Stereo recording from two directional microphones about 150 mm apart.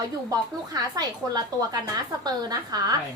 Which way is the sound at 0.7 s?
25° right (ahead or behind).